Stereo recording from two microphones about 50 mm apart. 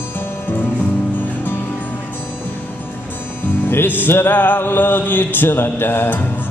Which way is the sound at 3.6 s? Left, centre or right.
Left.